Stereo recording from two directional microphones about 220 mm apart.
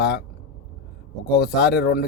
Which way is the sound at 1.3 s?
45° left (ahead or behind).